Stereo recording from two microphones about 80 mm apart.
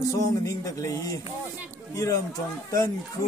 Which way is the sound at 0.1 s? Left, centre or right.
Left.